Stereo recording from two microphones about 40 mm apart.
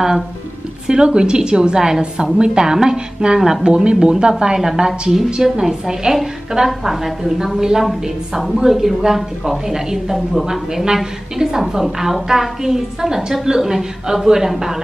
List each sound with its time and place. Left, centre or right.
0.8 s a woman's voice: right